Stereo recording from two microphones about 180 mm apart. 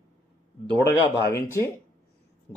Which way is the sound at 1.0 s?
15° left (ahead or behind).